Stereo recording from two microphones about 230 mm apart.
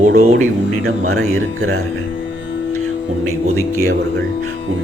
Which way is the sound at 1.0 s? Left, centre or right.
Right.